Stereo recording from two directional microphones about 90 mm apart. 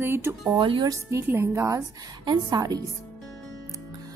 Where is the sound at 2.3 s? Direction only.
50° right (ahead or behind).